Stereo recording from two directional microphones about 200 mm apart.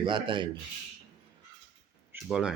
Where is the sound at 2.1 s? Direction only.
5° right (ahead or behind).